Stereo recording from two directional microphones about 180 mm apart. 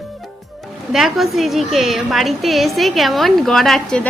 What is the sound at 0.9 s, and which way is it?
A woman's voice, centre (ahead or behind).